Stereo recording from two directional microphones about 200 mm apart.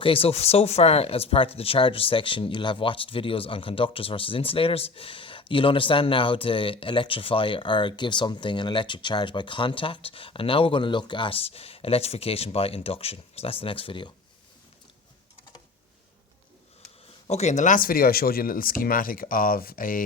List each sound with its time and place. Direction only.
0.0 s speech: 30° left (ahead or behind)
17.2 s speech: 35° left (ahead or behind)